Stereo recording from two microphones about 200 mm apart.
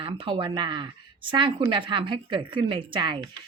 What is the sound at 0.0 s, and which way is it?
A woman's voice, 25° right (ahead or behind).